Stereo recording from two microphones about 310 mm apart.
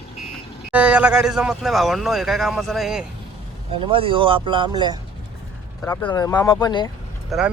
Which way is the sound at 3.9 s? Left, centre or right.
Centre.